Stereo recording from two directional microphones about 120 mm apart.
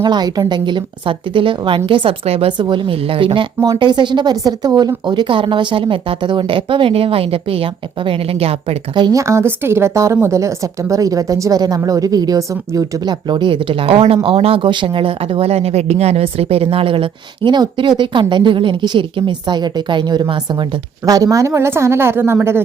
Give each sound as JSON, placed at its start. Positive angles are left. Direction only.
{"t": 0.0, "sound": "speech", "side_deg": -35}
{"t": 2.5, "sound": "speech", "side_deg": -40}
{"t": 3.6, "sound": "speech", "side_deg": -35}
{"t": 9.1, "sound": "a woman's voice", "side_deg": -25}